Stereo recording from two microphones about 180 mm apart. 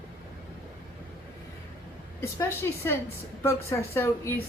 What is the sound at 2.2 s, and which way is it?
A woman's voice, 15° left (ahead or behind).